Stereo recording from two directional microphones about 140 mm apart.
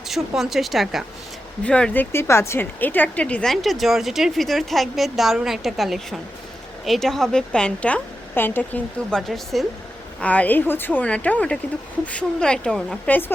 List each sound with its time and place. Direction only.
0.1 s a woman's voice: centre (ahead or behind)